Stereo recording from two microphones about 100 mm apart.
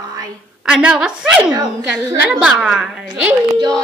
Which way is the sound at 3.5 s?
45° right (ahead or behind).